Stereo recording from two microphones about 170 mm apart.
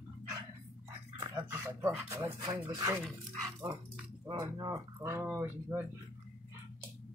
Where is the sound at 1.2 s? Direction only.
20° right (ahead or behind).